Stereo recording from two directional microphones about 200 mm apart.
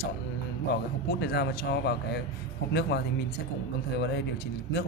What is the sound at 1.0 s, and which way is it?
Speech, 55° left (ahead or behind).